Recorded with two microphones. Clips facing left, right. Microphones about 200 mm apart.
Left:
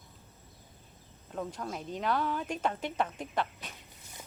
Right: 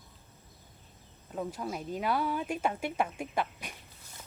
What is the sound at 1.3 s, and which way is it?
Speech, 5° right (ahead or behind).